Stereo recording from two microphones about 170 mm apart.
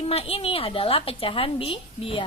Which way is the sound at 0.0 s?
35° left (ahead or behind).